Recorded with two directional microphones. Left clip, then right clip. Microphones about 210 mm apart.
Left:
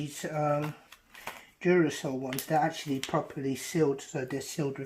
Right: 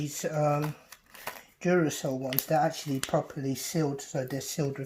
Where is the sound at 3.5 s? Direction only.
15° right (ahead or behind).